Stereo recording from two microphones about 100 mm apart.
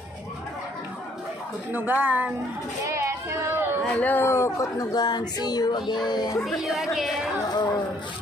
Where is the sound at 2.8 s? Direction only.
30° right (ahead or behind).